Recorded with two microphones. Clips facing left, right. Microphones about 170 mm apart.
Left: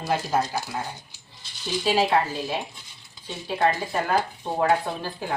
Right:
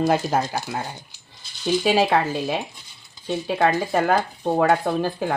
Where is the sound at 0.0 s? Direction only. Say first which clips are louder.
Right 7 dB; 55° right (ahead or behind).